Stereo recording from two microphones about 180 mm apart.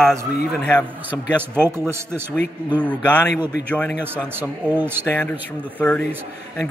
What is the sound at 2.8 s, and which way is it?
Speech, 10° left (ahead or behind).